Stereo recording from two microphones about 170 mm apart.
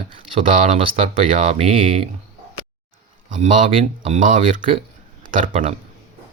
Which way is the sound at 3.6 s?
30° right (ahead or behind).